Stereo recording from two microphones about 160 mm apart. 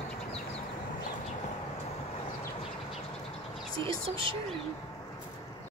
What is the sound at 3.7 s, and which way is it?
Whispering, 35° right (ahead or behind).